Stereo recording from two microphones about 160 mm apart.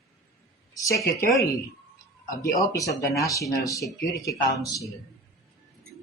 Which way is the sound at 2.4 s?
20° left (ahead or behind).